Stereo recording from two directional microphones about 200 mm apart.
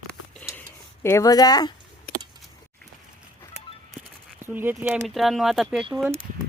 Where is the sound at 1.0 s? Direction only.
15° left (ahead or behind).